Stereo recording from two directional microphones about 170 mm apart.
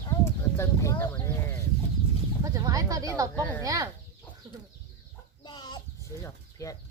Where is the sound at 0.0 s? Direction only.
20° left (ahead or behind).